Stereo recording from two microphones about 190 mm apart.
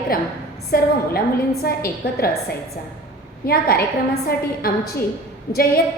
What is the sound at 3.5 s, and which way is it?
A woman's voice, 50° left (ahead or behind).